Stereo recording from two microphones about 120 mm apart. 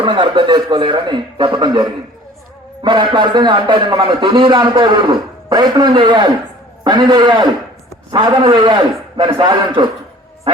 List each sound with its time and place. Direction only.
0.0 s a man's voice: 40° right (ahead or behind)